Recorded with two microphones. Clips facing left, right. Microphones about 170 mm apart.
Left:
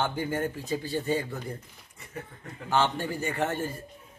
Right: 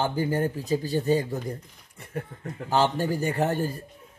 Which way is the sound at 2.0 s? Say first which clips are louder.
Right 6 dB; 55° right (ahead or behind).